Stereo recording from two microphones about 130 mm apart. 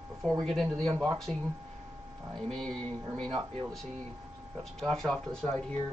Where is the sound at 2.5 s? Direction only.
5° left (ahead or behind).